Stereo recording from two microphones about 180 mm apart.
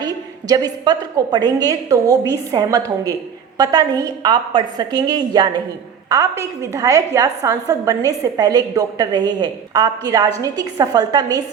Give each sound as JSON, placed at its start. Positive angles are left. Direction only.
{"t": 0.0, "sound": "a woman's voice", "side_deg": -20}